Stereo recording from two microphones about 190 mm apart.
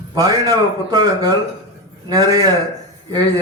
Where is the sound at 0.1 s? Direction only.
20° right (ahead or behind).